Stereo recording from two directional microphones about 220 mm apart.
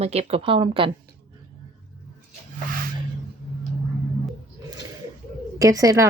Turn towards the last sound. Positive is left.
turn(degrees=-15)  # may be behind; listen again after turning